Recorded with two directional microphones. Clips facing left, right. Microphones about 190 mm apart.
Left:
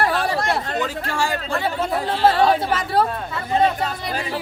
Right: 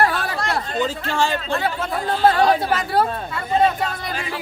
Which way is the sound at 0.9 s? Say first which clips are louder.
Right 2 dB; 25° right (ahead or behind).